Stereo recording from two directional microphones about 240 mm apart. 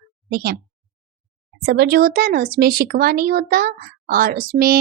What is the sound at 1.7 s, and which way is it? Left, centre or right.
Speech, right.